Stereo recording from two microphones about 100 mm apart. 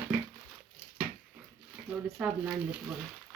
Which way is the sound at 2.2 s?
10° right (ahead or behind).